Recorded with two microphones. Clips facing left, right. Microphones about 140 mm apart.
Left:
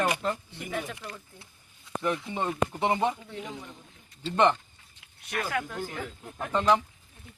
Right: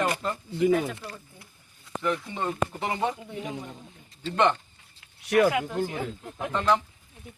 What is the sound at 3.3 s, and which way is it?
Speech, 10° right (ahead or behind).